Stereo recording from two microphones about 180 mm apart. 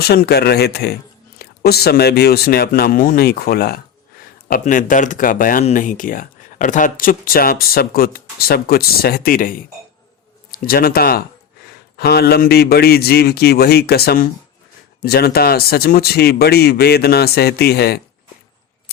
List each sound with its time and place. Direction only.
0.0 s speech: 60° left (ahead or behind)
4.5 s speech: 45° left (ahead or behind)